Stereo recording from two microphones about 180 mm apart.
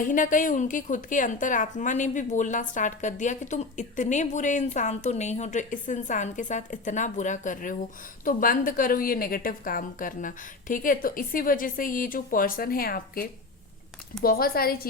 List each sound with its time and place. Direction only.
0.0 s a woman's voice: 45° left (ahead or behind)
14.3 s a woman's voice: 55° left (ahead or behind)